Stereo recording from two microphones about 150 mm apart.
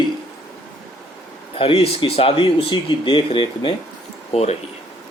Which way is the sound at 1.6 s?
40° left (ahead or behind).